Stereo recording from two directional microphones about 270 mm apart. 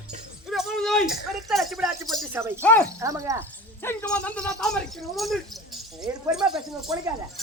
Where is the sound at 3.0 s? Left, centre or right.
Centre.